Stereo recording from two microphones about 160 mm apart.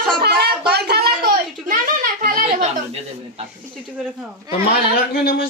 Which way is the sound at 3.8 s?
5° right (ahead or behind).